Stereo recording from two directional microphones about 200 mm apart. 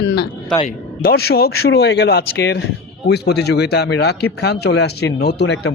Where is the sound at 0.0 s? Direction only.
60° left (ahead or behind).